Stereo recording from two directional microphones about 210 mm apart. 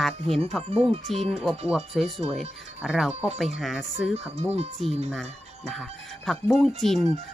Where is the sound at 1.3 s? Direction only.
Centre (ahead or behind).